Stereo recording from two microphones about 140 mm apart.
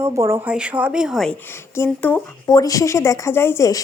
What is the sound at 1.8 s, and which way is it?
Speech, 10° left (ahead or behind).